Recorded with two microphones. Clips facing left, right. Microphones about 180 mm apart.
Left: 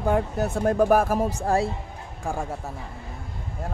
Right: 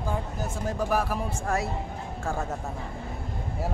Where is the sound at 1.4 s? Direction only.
30° left (ahead or behind).